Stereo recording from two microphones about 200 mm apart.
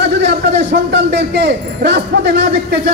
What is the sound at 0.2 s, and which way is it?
A man's voice, 55° right (ahead or behind).